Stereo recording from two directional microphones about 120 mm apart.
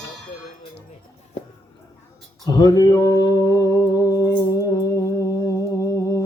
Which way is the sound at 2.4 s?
30° left (ahead or behind).